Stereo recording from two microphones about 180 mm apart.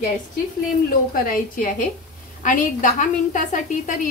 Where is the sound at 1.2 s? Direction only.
50° left (ahead or behind).